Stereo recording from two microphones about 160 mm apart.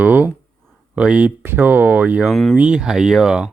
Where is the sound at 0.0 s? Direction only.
10° right (ahead or behind).